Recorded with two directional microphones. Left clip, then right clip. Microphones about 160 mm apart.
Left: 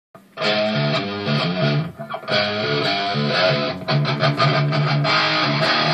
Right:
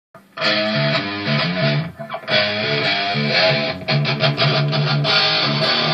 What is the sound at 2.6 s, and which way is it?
Music, 40° left (ahead or behind).